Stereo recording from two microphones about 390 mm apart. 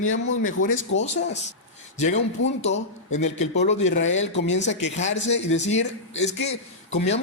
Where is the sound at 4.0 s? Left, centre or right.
Left.